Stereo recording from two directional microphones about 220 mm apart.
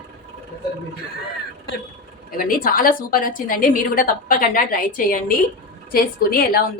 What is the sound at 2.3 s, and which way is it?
A woman's voice, 40° left (ahead or behind).